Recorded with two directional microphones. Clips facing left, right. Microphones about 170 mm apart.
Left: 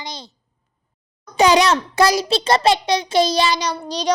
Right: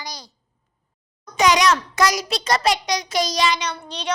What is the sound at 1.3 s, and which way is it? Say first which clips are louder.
A child's voice: left 3 dB; 30° left (ahead or behind).